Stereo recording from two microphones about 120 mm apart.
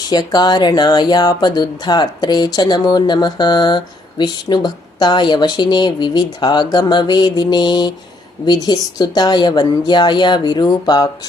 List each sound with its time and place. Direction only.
0.1 s speech: 35° left (ahead or behind)